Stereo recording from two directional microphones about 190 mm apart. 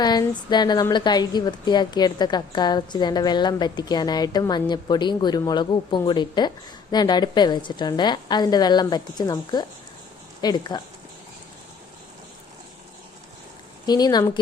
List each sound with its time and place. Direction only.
0.0 s a woman's voice: 20° left (ahead or behind)
13.8 s a woman's voice: 20° left (ahead or behind)